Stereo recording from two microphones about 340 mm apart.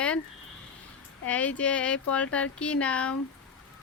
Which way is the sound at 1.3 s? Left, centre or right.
Centre.